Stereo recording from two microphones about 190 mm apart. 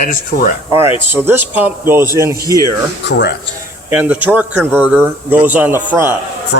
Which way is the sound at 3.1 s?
65° left (ahead or behind).